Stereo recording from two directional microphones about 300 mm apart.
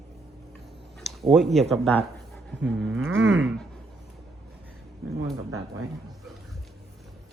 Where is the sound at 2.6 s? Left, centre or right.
Right.